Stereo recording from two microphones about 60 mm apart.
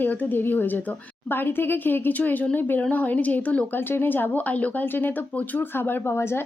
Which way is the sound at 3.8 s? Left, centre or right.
Left.